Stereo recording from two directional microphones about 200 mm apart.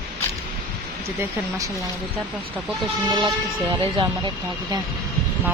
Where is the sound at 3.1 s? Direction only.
25° right (ahead or behind).